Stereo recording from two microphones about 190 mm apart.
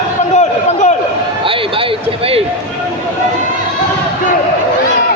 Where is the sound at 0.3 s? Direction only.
35° left (ahead or behind).